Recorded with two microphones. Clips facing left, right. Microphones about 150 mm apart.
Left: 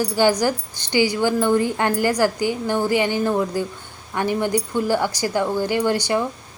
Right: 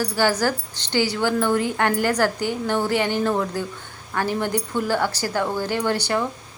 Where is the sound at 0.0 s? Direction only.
15° left (ahead or behind).